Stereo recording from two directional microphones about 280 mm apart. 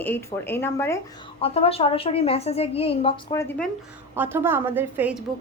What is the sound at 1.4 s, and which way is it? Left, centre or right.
A woman's voice, left.